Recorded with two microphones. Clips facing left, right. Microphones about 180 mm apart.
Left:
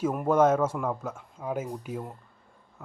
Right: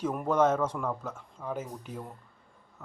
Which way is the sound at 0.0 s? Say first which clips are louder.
Left 3 dB; 5° left (ahead or behind).